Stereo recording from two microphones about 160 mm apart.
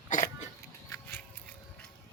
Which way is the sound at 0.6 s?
20° left (ahead or behind).